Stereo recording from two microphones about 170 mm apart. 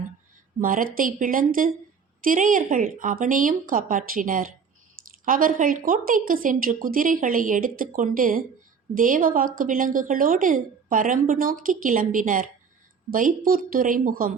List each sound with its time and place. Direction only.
0.6 s a woman's voice: 55° right (ahead or behind)